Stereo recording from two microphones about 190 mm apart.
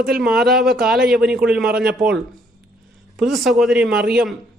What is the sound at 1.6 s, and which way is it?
Speech, 50° right (ahead or behind).